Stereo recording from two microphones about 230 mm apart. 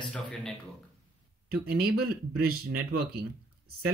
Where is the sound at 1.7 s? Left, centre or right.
Right.